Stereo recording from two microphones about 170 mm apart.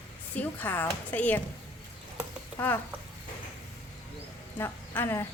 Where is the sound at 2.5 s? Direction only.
15° left (ahead or behind).